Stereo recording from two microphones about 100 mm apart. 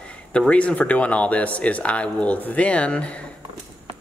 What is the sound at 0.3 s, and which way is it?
Speech, 10° left (ahead or behind).